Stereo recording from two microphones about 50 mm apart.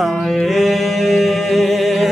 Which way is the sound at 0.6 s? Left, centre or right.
Centre.